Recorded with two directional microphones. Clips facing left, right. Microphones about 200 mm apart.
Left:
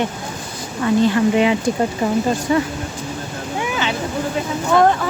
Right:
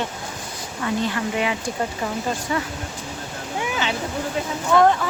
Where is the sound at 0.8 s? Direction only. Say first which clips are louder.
Left 9 dB; 30° left (ahead or behind).